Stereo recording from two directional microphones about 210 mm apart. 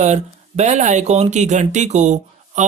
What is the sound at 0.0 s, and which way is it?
Speech, 35° right (ahead or behind).